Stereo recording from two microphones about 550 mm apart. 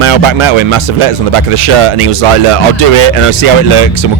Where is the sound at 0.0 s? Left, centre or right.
Right.